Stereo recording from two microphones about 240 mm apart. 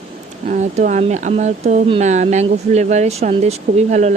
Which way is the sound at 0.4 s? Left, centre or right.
Right.